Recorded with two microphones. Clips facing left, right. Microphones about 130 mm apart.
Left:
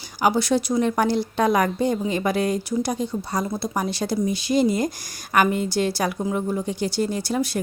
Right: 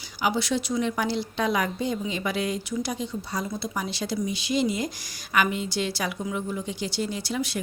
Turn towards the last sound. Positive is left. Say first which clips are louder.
# left 5 dB
turn(degrees=45)  # may be behind; listen again after turning